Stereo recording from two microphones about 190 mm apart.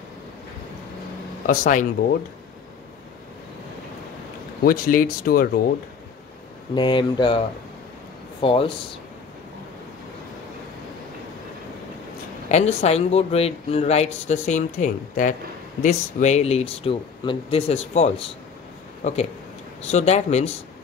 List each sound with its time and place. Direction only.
1.5 s speech: 45° left (ahead or behind)
4.6 s speech: 50° left (ahead or behind)
6.7 s speech: 25° left (ahead or behind)
12.4 s speech: 35° left (ahead or behind)